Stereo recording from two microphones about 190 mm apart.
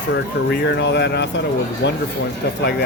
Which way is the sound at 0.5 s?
65° left (ahead or behind).